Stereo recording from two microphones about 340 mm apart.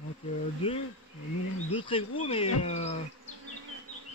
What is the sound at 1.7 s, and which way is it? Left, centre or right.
Speech, centre.